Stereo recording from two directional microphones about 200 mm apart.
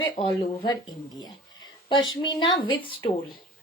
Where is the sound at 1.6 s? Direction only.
20° left (ahead or behind).